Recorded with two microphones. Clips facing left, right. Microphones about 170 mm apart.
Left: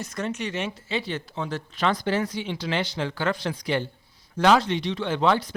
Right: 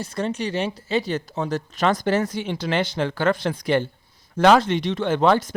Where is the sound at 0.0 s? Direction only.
30° right (ahead or behind).